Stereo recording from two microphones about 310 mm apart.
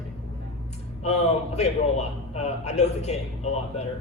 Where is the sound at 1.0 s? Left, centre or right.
Left.